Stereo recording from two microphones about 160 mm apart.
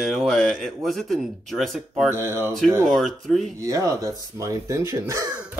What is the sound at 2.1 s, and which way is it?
Speech, 15° right (ahead or behind).